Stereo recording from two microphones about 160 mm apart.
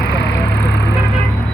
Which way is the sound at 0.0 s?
90° left.